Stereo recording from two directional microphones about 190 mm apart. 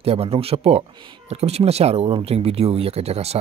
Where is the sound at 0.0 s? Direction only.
30° right (ahead or behind).